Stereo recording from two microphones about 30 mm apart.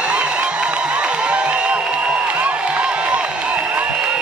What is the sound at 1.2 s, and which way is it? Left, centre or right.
Music, right.